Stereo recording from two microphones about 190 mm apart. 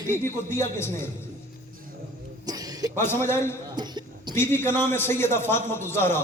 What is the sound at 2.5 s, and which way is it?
Music, 20° right (ahead or behind).